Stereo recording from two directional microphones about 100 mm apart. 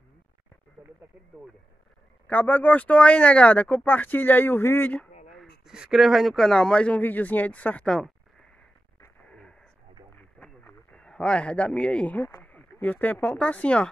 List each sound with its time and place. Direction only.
2.2 s speech: 15° left (ahead or behind)
5.3 s speech: centre (ahead or behind)
9.3 s radio: 10° left (ahead or behind)
12.3 s speech: 20° left (ahead or behind)